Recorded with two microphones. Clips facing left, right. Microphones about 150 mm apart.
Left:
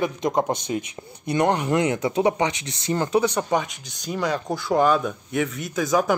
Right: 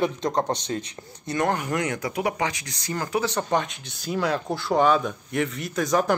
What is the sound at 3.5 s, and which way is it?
Speech, centre (ahead or behind).